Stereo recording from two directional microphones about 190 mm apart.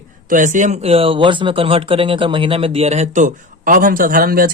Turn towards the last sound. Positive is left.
turn(degrees=-50)  # may be behind; listen again after turning